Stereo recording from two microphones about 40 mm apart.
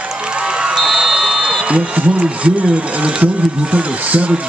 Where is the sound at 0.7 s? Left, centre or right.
Centre.